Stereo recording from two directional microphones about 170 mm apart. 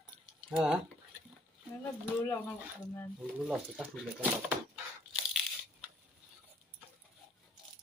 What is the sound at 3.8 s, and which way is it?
Speech, 10° right (ahead or behind).